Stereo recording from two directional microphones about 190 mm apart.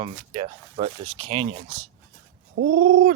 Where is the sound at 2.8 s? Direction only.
50° right (ahead or behind).